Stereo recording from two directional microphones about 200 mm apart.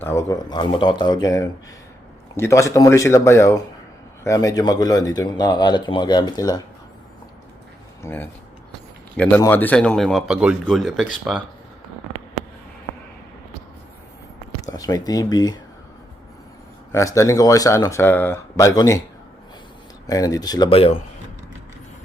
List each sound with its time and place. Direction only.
0.0 s speech: 15° left (ahead or behind)
8.0 s speech: 10° left (ahead or behind)
14.7 s speech: 15° left (ahead or behind)
16.9 s speech: 15° left (ahead or behind)
20.1 s speech: 20° left (ahead or behind)